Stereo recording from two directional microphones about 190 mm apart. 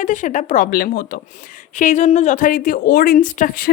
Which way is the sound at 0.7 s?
50° left (ahead or behind).